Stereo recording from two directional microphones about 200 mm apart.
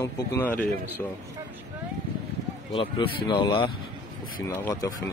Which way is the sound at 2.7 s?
25° left (ahead or behind).